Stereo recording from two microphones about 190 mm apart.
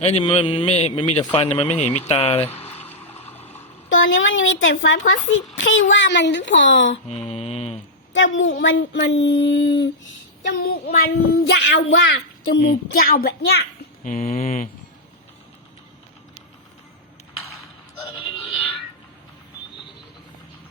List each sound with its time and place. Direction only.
0.0 s a man's voice: 35° left (ahead or behind)
1.2 s speech: 25° left (ahead or behind)
1.5 s a man's voice: 35° left (ahead or behind)
2.6 s a sound: 10° left (ahead or behind)
3.8 s a woman's voice: 90° left
5.9 s speech: 70° left (ahead or behind)
7.1 s mantra: 35° left (ahead or behind)
8.1 s speech: 80° left
10.7 s child singing: 50° left (ahead or behind)
11.6 s speech: 70° left (ahead or behind)
12.6 s a child's voice: 50° left (ahead or behind)
14.1 s a man's voice: 35° left (ahead or behind)
18.2 s music: 30° left (ahead or behind)